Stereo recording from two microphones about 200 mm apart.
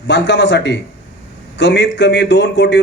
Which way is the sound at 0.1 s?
60° left (ahead or behind).